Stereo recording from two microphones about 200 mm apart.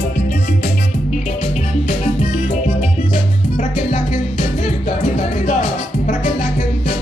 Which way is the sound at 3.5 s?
40° left (ahead or behind).